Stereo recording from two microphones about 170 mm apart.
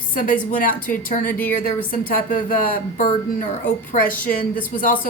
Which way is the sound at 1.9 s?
55° left (ahead or behind).